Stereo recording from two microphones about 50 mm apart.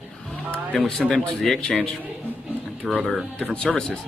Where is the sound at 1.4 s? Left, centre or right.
Centre.